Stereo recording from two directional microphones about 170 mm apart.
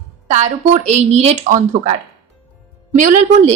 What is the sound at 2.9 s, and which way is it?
Speech, 45° right (ahead or behind).